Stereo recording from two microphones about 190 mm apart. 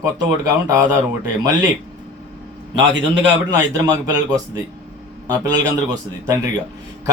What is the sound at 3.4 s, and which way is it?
A man's voice, 20° right (ahead or behind).